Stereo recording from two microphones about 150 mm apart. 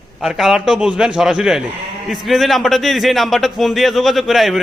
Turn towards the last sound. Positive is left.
turn(degrees=0)  # may be behind; listen again after turning